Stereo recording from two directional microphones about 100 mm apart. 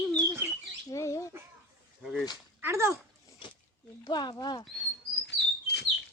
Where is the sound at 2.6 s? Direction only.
25° right (ahead or behind).